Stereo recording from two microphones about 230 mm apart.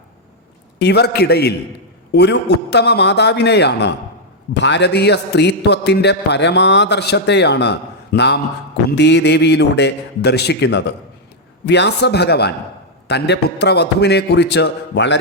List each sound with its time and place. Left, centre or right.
0.8 s a man's voice: left